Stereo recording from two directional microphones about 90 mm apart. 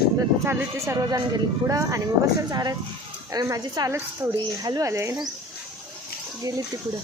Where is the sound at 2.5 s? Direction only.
50° right (ahead or behind).